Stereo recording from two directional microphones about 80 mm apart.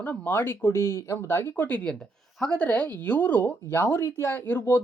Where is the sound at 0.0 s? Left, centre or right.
Left; by 2.6 s centre.